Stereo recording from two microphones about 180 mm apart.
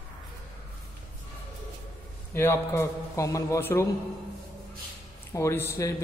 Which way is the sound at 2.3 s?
15° left (ahead or behind).